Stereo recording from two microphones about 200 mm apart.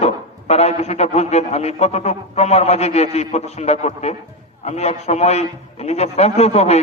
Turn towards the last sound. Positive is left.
turn(degrees=30)  # may be behind; listen again after turning